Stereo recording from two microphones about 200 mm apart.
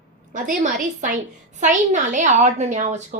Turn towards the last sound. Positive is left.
turn(degrees=-35)  # may be behind; listen again after turning